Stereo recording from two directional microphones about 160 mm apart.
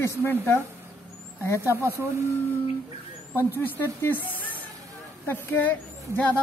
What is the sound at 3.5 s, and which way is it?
Speech, 15° left (ahead or behind).